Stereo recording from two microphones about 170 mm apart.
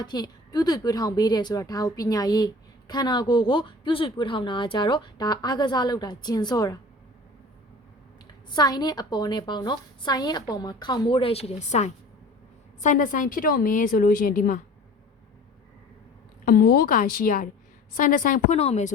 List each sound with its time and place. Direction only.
0.0 s speech: 25° left (ahead or behind)
8.4 s a woman's voice: 25° left (ahead or behind); by 14.6 s 60° left (ahead or behind)
16.5 s a woman's voice: 65° left (ahead or behind); by 18.9 s 40° left (ahead or behind)